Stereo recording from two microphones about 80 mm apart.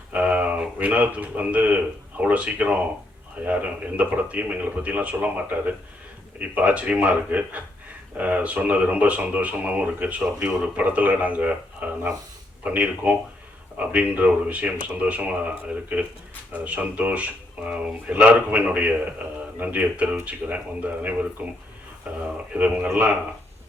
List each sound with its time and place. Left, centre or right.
0.1 s a man's voice: centre